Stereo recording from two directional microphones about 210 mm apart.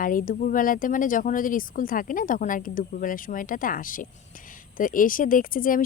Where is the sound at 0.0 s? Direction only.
40° left (ahead or behind).